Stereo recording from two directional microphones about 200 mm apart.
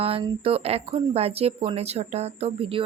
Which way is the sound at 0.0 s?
30° right (ahead or behind).